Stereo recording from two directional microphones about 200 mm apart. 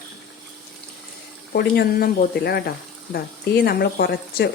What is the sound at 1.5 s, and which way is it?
Speech, 50° left (ahead or behind).